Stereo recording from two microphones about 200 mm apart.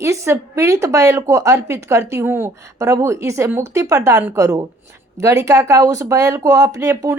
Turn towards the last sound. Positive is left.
turn(degrees=-15)  # may be behind; listen again after turning